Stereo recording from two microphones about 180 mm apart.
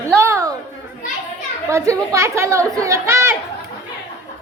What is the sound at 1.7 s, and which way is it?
Speech, 15° right (ahead or behind).